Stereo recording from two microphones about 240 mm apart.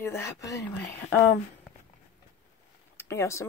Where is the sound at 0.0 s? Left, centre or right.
Centre.